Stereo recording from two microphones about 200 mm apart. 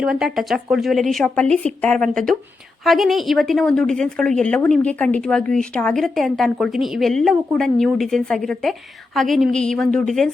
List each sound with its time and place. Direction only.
0.0 s a woman's voice: 5° right (ahead or behind)